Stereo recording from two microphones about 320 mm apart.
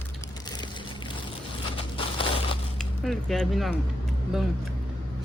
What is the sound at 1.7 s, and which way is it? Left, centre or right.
Crushing, centre.